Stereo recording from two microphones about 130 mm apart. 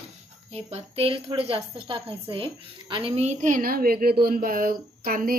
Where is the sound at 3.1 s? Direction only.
60° right (ahead or behind); by 4.7 s 90° right.